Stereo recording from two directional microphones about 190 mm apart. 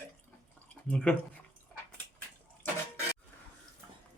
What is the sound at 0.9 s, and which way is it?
Speech, 5° left (ahead or behind).